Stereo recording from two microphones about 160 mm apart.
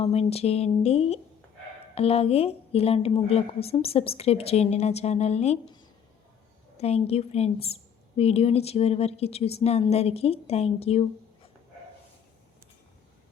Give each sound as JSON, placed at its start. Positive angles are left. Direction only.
{"t": 0.0, "sound": "a woman's voice", "side_deg": 40}
{"t": 6.7, "sound": "a woman's voice", "side_deg": 40}